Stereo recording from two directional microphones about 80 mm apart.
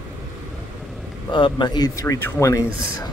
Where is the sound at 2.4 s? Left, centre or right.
Left.